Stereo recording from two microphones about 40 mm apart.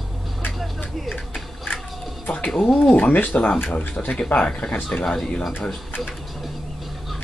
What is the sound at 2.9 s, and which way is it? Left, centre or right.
Speech, left.